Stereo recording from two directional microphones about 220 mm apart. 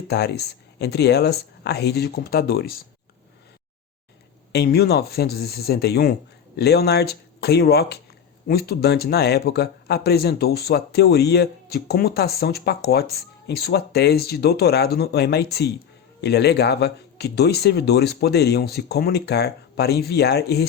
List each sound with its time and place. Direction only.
0.1 s speech: 50° left (ahead or behind)
4.5 s speech: 45° left (ahead or behind)